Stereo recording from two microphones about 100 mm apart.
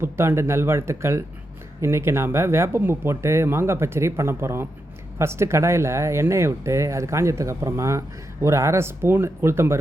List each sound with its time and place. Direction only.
0.0 s speech: 25° right (ahead or behind)